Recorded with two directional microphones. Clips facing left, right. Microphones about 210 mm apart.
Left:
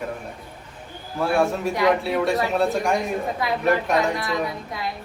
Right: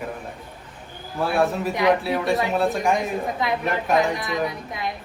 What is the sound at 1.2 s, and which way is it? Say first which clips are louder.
A man's voice: left 1 dB; centre (ahead or behind).